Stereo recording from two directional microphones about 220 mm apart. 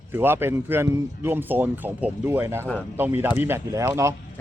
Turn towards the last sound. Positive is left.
turn(degrees=-15)  # may be behind; listen again after turning